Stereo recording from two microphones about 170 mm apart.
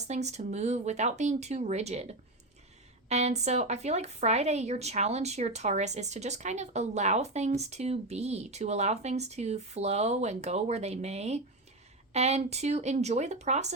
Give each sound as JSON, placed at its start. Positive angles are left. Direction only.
{"t": 0.1, "sound": "a woman's voice", "side_deg": -40}